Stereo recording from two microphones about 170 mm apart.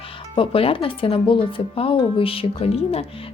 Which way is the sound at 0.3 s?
30° left (ahead or behind).